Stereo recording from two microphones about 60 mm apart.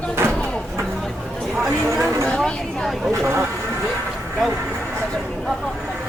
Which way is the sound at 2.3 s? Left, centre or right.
Centre.